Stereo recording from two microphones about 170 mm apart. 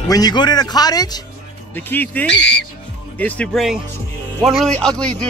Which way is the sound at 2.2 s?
90° left.